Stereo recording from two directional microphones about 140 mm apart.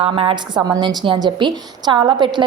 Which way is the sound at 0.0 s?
40° right (ahead or behind).